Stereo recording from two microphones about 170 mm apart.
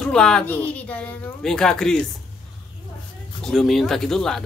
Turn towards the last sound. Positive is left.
turn(degrees=0)  # may be behind; listen again after turning